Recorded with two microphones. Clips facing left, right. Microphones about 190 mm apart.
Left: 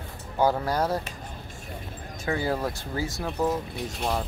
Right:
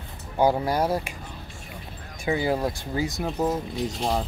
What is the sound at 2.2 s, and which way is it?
Speech, 15° right (ahead or behind).